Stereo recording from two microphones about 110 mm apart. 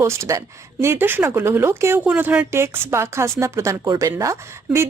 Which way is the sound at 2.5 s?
25° right (ahead or behind).